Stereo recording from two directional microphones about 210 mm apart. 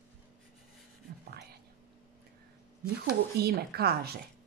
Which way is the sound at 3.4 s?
50° right (ahead or behind).